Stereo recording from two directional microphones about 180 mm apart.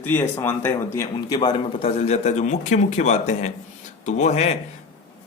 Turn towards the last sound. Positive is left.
turn(degrees=35)  # may be behind; listen again after turning